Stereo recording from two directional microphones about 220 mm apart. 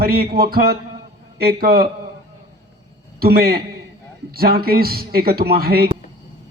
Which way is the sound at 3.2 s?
45° right (ahead or behind).